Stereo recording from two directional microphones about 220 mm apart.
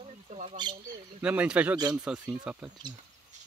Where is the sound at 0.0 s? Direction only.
30° right (ahead or behind).